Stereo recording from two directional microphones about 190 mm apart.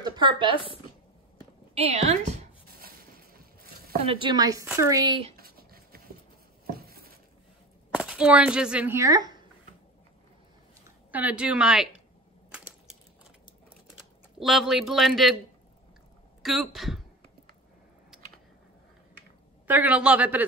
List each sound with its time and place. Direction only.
0.0 s speech: 25° right (ahead or behind)
1.8 s a woman's voice: 35° right (ahead or behind)
4.0 s speech: 30° right (ahead or behind)
5.4 s dog: 50° right (ahead or behind)
7.9 s speech: 5° right (ahead or behind)
11.1 s a man's voice: 10° right (ahead or behind)
14.4 s a man's voice: centre (ahead or behind)
16.4 s a man's voice: centre (ahead or behind)
19.7 s a woman's voice: 10° right (ahead or behind)